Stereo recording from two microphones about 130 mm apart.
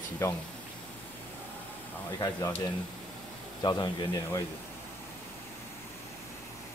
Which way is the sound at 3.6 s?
30° left (ahead or behind).